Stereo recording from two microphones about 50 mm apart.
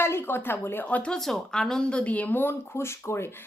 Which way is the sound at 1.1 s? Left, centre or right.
Centre.